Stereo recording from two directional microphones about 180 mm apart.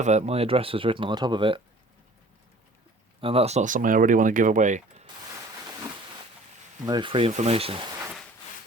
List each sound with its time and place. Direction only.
0.0 s speech: 40° right (ahead or behind)
3.2 s speech: 30° right (ahead or behind)
6.8 s speech: 25° right (ahead or behind)